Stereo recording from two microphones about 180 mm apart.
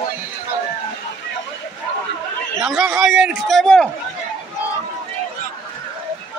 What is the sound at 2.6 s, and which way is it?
A man's voice, 5° right (ahead or behind).